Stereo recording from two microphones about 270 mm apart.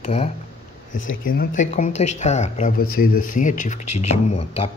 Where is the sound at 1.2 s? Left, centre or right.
Left.